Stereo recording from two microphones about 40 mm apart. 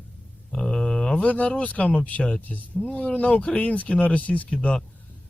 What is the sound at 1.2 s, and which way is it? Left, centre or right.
Speech, left.